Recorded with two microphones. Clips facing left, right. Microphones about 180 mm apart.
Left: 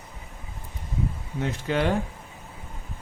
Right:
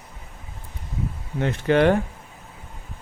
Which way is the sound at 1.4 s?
65° right (ahead or behind).